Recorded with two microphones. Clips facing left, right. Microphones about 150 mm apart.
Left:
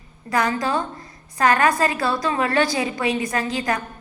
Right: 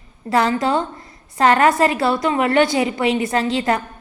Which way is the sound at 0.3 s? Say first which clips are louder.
Right 4 dB; 25° right (ahead or behind).